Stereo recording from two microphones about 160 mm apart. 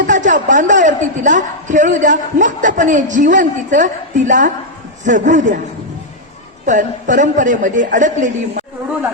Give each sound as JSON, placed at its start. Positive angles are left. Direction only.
{"t": 0.0, "sound": "a sound", "side_deg": -50}
{"t": 0.4, "sound": "a man's voice", "side_deg": -50}
{"t": 6.7, "sound": "a man's voice", "side_deg": -50}